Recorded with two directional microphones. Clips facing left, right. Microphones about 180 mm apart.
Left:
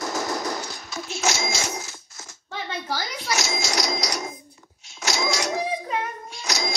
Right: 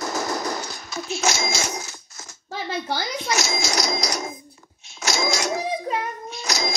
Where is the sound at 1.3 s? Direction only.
45° right (ahead or behind).